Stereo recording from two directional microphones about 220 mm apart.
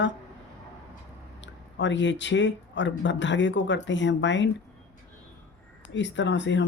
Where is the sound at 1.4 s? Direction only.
55° left (ahead or behind).